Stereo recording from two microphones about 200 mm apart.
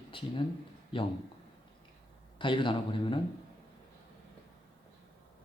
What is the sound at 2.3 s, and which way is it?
Speech, 25° left (ahead or behind).